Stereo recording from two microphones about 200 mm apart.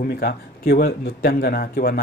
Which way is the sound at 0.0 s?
50° left (ahead or behind).